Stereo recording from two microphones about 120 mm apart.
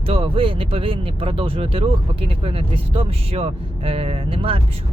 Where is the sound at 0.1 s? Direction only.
50° right (ahead or behind).